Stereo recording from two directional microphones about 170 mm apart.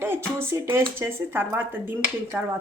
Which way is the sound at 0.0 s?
15° right (ahead or behind).